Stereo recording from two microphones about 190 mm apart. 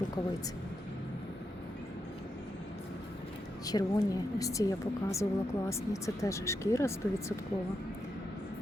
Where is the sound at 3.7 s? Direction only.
20° left (ahead or behind).